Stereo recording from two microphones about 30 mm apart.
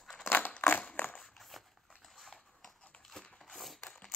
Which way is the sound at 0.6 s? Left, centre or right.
Left.